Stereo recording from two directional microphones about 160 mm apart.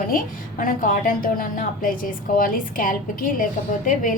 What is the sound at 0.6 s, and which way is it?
A woman's voice, 60° left (ahead or behind).